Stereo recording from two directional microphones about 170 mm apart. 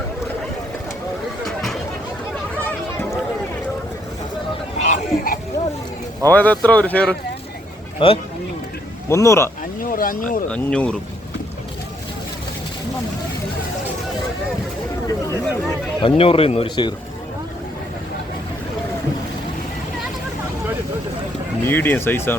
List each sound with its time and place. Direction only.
1.5 s a sound: centre (ahead or behind)
4.8 s a sound: 50° left (ahead or behind)
6.2 s speech: 10° left (ahead or behind)
7.9 s speech: 35° left (ahead or behind)
9.0 s speech: 15° left (ahead or behind)
9.8 s speech: 55° left (ahead or behind)
10.5 s speech: 5° left (ahead or behind)
16.0 s speech: 30° left (ahead or behind)
21.7 s speech: 10° left (ahead or behind)